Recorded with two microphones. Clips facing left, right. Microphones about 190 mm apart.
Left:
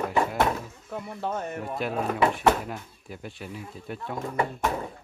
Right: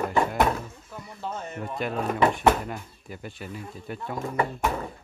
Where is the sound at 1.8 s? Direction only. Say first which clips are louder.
Right 1 dB; 5° left (ahead or behind).